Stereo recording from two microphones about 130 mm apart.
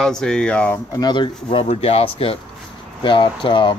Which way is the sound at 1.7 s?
50° left (ahead or behind).